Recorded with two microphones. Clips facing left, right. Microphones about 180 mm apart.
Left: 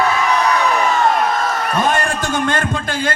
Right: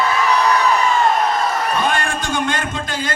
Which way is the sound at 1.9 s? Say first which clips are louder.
Left 2 dB; 45° left (ahead or behind).